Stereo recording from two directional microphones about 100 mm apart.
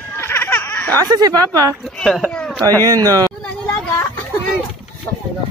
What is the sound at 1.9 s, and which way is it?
Speech, 5° left (ahead or behind).